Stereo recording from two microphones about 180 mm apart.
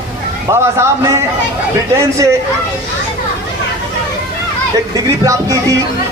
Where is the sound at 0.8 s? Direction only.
15° right (ahead or behind).